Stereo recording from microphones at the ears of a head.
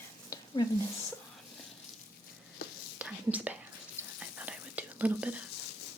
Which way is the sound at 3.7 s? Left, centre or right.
Left.